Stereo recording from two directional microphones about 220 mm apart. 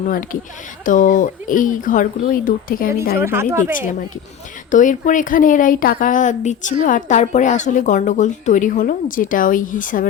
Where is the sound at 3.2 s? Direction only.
10° right (ahead or behind).